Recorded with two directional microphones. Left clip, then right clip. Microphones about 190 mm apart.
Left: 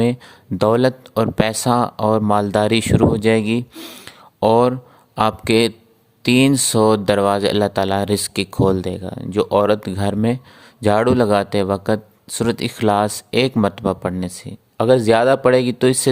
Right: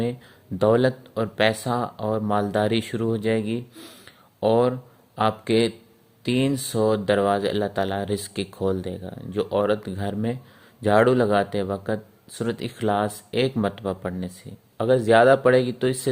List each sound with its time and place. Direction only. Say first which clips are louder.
0.6 s speech: left 4 dB; 40° left (ahead or behind)